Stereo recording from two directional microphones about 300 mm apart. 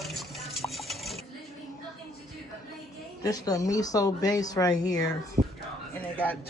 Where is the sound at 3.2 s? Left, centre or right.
Centre.